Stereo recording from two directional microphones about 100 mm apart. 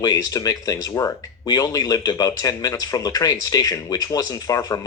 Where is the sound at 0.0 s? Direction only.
40° left (ahead or behind).